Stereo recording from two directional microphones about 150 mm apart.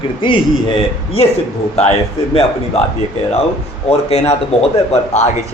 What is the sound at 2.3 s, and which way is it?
Speech, 40° left (ahead or behind).